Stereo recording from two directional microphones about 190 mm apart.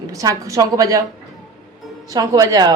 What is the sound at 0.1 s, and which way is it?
Speech, 15° right (ahead or behind).